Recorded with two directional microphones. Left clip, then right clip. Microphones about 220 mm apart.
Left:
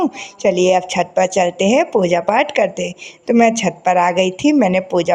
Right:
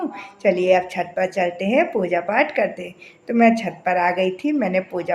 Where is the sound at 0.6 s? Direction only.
35° left (ahead or behind).